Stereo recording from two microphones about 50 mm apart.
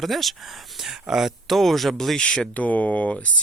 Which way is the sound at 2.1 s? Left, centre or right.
Centre.